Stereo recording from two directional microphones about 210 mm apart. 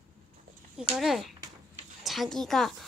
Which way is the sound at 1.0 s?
Centre (ahead or behind).